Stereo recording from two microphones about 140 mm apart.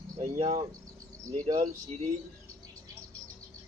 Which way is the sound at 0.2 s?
50° right (ahead or behind).